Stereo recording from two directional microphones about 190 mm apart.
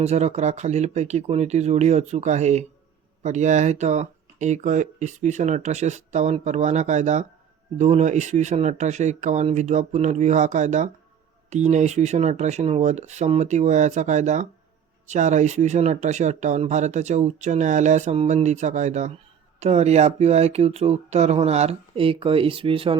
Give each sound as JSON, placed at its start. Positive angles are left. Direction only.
{"t": 0.0, "sound": "speech", "side_deg": -35}